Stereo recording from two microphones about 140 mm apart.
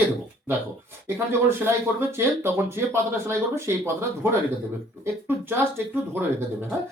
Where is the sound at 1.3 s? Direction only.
15° right (ahead or behind).